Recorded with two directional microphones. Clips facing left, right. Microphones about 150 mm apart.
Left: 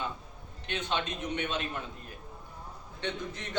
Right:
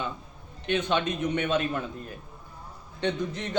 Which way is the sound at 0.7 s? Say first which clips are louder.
Right 7 dB; 60° right (ahead or behind).